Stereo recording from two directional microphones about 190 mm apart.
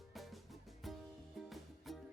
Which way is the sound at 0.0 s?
Centre (ahead or behind).